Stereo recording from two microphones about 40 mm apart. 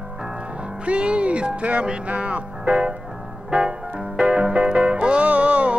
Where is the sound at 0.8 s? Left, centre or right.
Right.